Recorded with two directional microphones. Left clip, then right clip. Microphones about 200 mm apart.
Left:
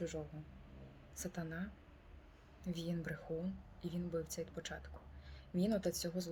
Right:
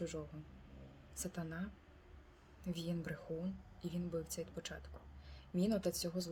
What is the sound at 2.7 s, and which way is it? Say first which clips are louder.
Speech: even; 15° right (ahead or behind).